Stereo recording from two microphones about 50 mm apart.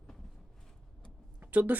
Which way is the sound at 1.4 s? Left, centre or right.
Right.